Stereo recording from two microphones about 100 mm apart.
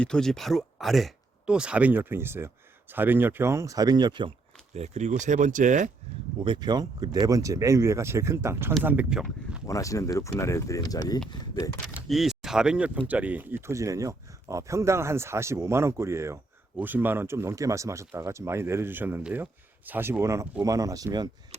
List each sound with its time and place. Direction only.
0.0 s speech: 5° left (ahead or behind); by 4.3 s 50° right (ahead or behind)
4.9 s speech: 90° right
6.4 s speech: 50° right (ahead or behind); by 9.0 s 20° right (ahead or behind)
9.0 s a sound: 5° right (ahead or behind)
9.6 s speech: 35° left (ahead or behind)
12.0 s speech: centre (ahead or behind); by 21.2 s 40° right (ahead or behind)